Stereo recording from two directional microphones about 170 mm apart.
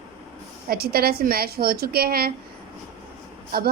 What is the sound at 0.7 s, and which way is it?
A woman's voice, 65° right (ahead or behind).